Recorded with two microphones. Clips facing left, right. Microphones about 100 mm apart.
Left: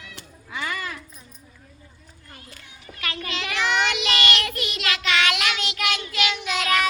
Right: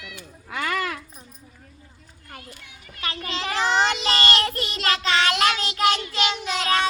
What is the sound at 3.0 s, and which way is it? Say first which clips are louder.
Child singing: right 2 dB; 30° right (ahead or behind).